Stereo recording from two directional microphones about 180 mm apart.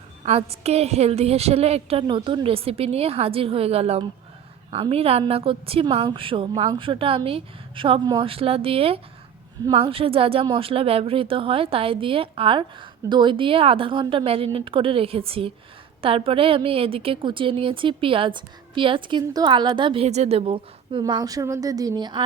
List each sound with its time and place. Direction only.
0.3 s a woman's voice: 35° right (ahead or behind)